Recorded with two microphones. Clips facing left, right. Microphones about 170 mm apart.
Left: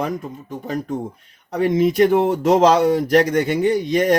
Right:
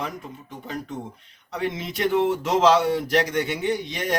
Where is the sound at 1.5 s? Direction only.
45° left (ahead or behind).